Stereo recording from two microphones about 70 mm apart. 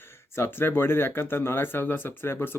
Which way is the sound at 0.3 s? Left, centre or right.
Left.